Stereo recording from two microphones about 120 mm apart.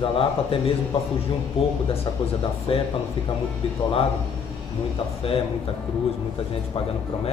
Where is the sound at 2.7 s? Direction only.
50° left (ahead or behind).